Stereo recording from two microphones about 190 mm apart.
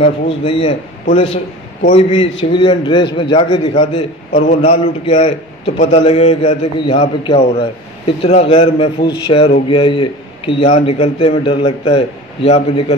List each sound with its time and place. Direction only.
0.0 s a man's voice: 30° left (ahead or behind)
4.3 s a man's voice: 40° left (ahead or behind)